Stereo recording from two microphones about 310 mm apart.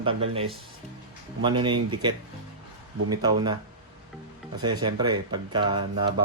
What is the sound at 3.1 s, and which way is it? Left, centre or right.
Speech, centre.